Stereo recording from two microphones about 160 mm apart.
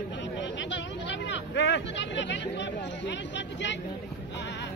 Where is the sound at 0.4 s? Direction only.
90° left.